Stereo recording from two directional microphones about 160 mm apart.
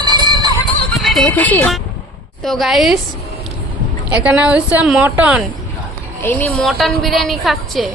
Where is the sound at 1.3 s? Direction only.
10° left (ahead or behind).